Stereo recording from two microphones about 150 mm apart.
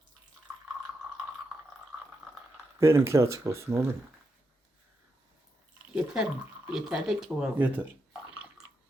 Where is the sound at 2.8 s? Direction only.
20° right (ahead or behind).